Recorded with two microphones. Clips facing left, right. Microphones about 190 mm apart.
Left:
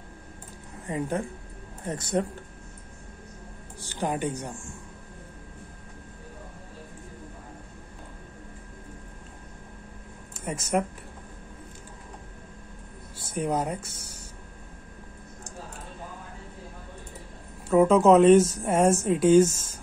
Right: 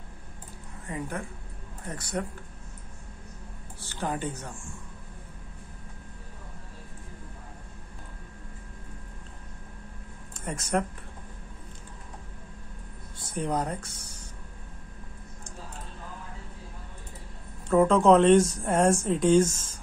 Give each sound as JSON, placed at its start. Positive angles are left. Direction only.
{"t": 0.8, "sound": "speech", "side_deg": 25}
{"t": 3.8, "sound": "speech", "side_deg": 15}
{"t": 10.3, "sound": "speech", "side_deg": 5}
{"t": 13.3, "sound": "speech", "side_deg": 5}
{"t": 17.6, "sound": "speech", "side_deg": 5}